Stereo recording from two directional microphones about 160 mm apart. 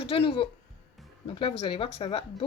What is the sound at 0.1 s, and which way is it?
Speech, 35° left (ahead or behind).